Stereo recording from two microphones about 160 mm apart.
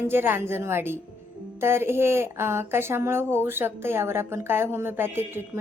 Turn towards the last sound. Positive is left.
turn(degrees=-15)  # may be behind; listen again after turning